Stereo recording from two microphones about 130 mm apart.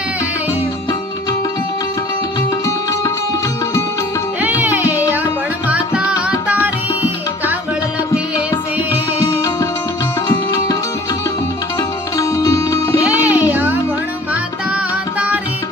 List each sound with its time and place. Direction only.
4.4 s music: 15° right (ahead or behind)
11.8 s sitar: 25° left (ahead or behind)
13.0 s music: 10° right (ahead or behind)